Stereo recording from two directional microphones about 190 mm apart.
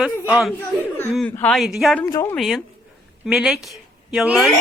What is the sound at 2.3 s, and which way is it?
A woman's voice, centre (ahead or behind).